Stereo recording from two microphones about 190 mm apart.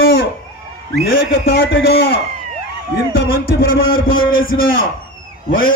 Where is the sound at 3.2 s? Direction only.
50° left (ahead or behind).